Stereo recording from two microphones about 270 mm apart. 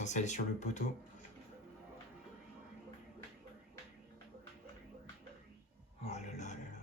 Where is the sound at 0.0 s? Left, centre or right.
Left.